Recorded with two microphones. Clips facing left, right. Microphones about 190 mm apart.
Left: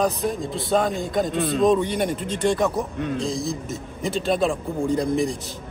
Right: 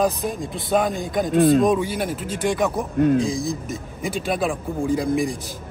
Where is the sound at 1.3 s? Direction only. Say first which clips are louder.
Right 8 dB; 50° right (ahead or behind).